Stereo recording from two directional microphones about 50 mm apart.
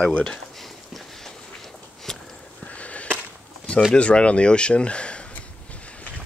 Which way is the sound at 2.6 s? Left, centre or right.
Left.